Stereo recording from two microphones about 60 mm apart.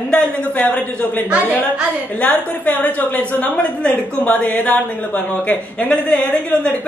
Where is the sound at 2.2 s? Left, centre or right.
Left.